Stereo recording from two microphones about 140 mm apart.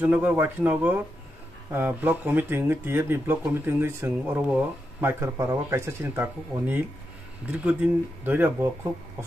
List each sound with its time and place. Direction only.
0.0 s speech: 10° right (ahead or behind)